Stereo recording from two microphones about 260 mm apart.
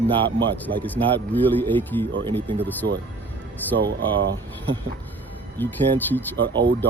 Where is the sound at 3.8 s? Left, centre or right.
Right.